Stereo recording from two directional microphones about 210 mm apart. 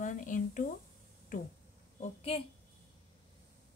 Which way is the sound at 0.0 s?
40° left (ahead or behind).